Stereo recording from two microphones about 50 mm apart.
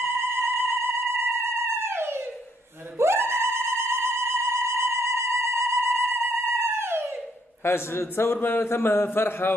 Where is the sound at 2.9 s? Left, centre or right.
Right.